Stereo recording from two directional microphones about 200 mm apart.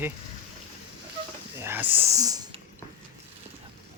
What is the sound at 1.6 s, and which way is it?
Speech, 10° right (ahead or behind).